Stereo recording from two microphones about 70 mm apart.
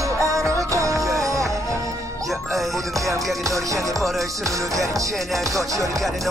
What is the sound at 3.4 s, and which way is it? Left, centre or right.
Music, right.